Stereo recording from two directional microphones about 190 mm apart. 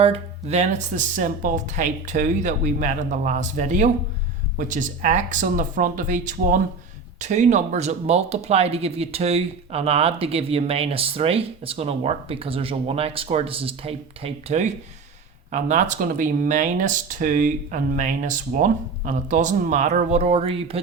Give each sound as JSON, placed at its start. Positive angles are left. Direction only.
{"t": 0.0, "sound": "speech", "side_deg": -35}